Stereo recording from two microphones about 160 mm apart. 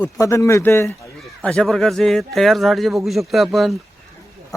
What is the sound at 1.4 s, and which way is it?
A man's voice, 5° left (ahead or behind).